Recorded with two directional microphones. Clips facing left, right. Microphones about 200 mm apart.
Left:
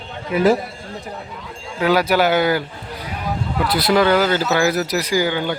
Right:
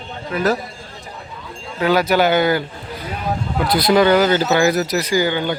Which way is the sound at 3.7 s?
5° left (ahead or behind).